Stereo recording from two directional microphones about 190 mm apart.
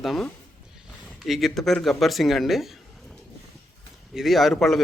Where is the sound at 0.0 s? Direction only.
Centre (ahead or behind).